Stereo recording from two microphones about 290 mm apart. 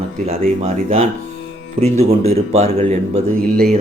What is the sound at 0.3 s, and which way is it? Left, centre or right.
Speech, right.